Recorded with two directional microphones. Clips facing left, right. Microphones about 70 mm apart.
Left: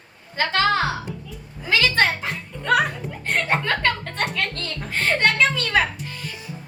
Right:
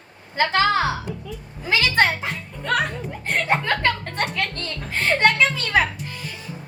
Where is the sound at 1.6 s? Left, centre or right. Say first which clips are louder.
Even; centre.